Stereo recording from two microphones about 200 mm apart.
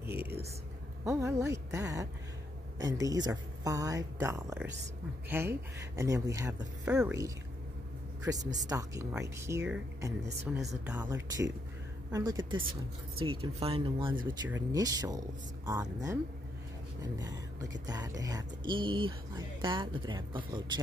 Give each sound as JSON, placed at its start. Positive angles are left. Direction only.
{"t": 0.0, "sound": "a sound", "side_deg": -10}
{"t": 1.0, "sound": "speech", "side_deg": -15}
{"t": 6.8, "sound": "a woman's voice", "side_deg": -5}
{"t": 8.2, "sound": "a man's voice", "side_deg": -20}